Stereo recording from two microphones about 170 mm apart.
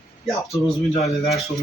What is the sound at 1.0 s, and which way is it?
Speech, centre (ahead or behind).